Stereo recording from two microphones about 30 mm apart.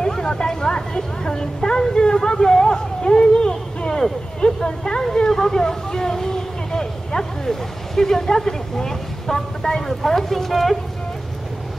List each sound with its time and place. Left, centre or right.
0.0 s a woman's voice: left
5.3 s speech: centre
9.8 s speech: centre